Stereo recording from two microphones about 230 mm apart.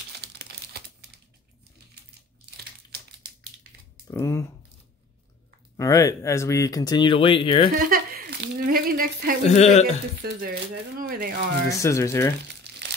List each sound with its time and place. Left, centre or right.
0.2 s crumpling: right
2.5 s crumpling: right
4.1 s speech: centre
5.8 s speech: centre
7.8 s speech: right
9.4 s speech: left
10.5 s speech: right
11.7 s speech: centre